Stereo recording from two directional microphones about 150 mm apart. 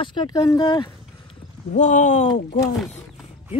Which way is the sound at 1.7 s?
55° left (ahead or behind).